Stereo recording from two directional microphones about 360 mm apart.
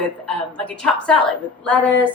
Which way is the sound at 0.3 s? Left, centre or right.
Centre.